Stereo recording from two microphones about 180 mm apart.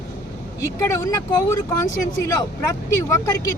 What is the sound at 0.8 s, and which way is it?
Speech, 15° left (ahead or behind).